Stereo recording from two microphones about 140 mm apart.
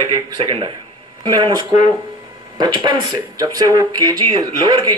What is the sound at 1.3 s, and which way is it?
Speech, 30° right (ahead or behind).